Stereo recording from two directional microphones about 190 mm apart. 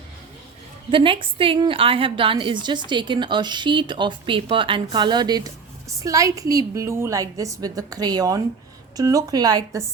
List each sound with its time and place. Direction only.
0.9 s a woman's voice: 25° right (ahead or behind)